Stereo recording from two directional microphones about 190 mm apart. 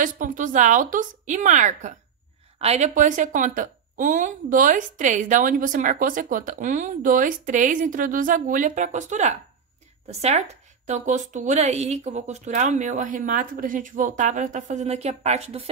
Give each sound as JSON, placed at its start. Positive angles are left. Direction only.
{"t": 0.0, "sound": "a woman's voice", "side_deg": -45}